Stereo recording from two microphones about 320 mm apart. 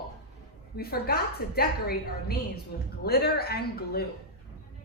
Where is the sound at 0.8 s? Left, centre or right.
Left.